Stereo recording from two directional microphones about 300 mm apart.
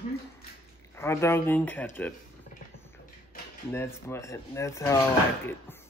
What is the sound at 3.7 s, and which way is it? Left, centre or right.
Speech, centre.